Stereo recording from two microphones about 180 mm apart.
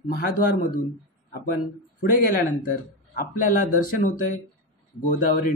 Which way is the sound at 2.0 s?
50° left (ahead or behind).